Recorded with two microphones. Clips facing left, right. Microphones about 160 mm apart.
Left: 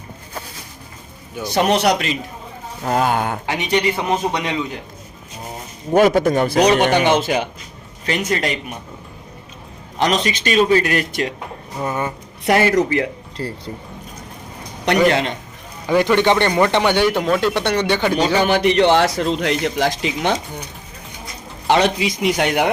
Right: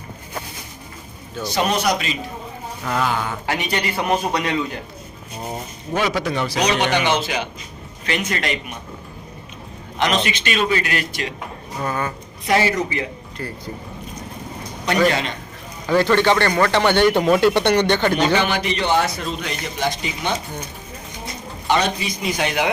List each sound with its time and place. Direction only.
1.4 s speech: 15° left (ahead or behind)
1.7 s a man's voice: 70° left (ahead or behind)
2.8 s a man's voice: 45° left (ahead or behind)
3.4 s a man's voice: 20° left (ahead or behind)
5.9 s a man's voice: 50° left (ahead or behind)
8.0 s a man's voice: 35° left (ahead or behind)
10.0 s a man's voice: 40° left (ahead or behind)
11.8 s a man's voice: 20° left (ahead or behind)
12.5 s speech: 55° left (ahead or behind)
13.4 s a man's voice: 30° left (ahead or behind)
15.9 s speech: 15° left (ahead or behind)
18.3 s a man's voice: 50° left (ahead or behind); by 20.3 s 90° left
21.7 s a man's voice: 90° left; by 22.7 s 55° left (ahead or behind)